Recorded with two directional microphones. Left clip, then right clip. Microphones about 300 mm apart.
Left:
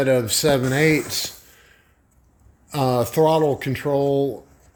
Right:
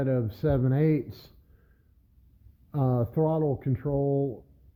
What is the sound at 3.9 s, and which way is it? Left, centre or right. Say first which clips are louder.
Speech: left 8 dB; centre.